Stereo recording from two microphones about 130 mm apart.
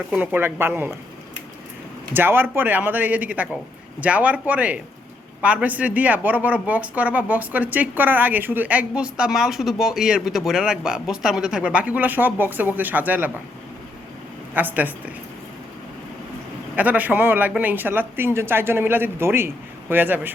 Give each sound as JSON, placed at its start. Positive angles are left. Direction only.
{"t": 0.1, "sound": "speech", "side_deg": -15}
{"t": 2.1, "sound": "speech", "side_deg": -15}
{"t": 14.5, "sound": "speech", "side_deg": -15}
{"t": 16.7, "sound": "speech", "side_deg": -10}